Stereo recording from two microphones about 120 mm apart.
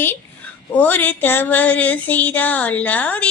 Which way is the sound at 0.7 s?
15° left (ahead or behind).